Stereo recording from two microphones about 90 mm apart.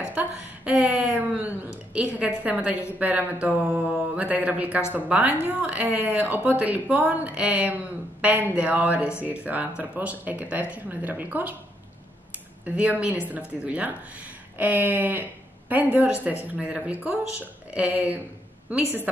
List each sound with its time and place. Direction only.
0.0 s speech: 15° right (ahead or behind)
12.6 s speech: 15° right (ahead or behind)